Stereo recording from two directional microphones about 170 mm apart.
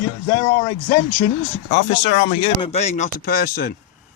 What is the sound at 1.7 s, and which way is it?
Speech, 35° left (ahead or behind).